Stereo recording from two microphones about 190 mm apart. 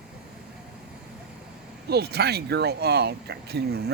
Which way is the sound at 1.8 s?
55° right (ahead or behind).